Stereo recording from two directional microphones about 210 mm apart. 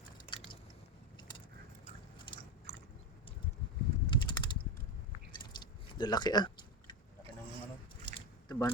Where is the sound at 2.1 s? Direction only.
20° left (ahead or behind).